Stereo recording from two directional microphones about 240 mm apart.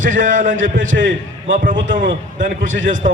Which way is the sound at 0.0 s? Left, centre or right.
Right.